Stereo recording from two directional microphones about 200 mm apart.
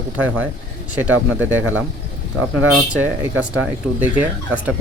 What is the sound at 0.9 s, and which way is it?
Speech, 10° right (ahead or behind).